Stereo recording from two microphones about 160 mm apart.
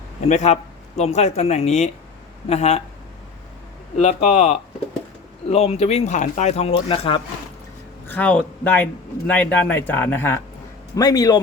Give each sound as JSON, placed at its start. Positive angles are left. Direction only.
{"t": 0.3, "sound": "speech", "side_deg": 45}
{"t": 3.9, "sound": "speech", "side_deg": 45}
{"t": 8.0, "sound": "a man's voice", "side_deg": 10}
{"t": 10.9, "sound": "speech", "side_deg": 25}